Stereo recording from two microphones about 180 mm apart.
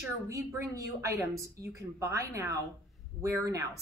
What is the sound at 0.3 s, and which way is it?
A woman's voice, 15° right (ahead or behind).